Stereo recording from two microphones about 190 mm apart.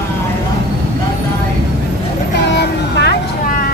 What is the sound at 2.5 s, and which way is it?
Vehicle, 60° left (ahead or behind).